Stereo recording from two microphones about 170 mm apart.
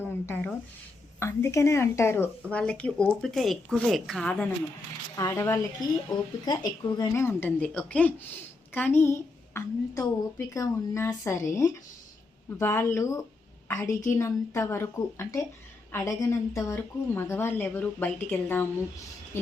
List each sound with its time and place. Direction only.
0.0 s speech: 15° left (ahead or behind)
5.1 s a woman's voice: 20° left (ahead or behind)
7.1 s speech: 15° left (ahead or behind)